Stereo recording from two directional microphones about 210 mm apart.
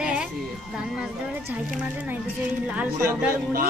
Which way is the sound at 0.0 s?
5° right (ahead or behind).